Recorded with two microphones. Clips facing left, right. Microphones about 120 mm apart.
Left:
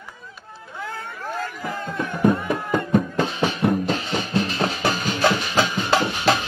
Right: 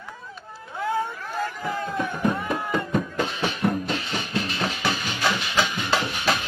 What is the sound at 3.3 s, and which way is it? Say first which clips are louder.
Music: left 4 dB; 40° left (ahead or behind).